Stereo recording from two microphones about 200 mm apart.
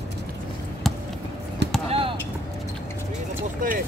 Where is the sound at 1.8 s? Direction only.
30° right (ahead or behind).